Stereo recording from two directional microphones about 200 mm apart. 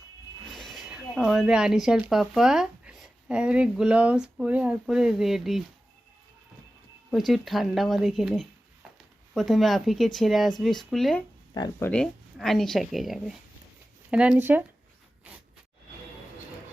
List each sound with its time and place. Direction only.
0.5 s speech: centre (ahead or behind)
7.1 s speech: centre (ahead or behind)
11.5 s speech: 20° left (ahead or behind)
11.9 s speech: 5° left (ahead or behind)